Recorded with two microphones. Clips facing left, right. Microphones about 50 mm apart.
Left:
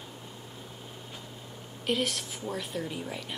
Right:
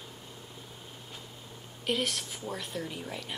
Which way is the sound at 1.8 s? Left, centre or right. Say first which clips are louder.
Left 2 dB; centre.